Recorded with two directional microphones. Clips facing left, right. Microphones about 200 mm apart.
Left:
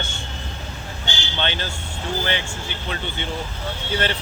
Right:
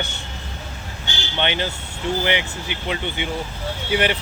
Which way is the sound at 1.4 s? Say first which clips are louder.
Right 4 dB; 15° right (ahead or behind).